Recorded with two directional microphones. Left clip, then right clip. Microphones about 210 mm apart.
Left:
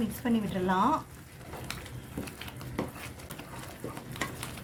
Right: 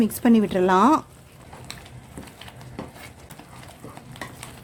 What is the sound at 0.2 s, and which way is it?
Speech, 50° right (ahead or behind).